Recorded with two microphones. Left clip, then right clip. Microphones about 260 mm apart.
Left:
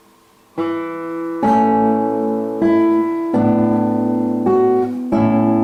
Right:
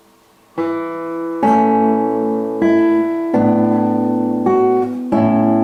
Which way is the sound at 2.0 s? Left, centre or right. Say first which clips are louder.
Right 1 dB; centre.